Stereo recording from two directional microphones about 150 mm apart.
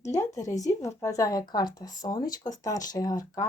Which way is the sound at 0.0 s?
20° left (ahead or behind).